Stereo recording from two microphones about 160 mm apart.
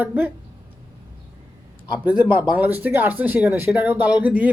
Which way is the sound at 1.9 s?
10° right (ahead or behind).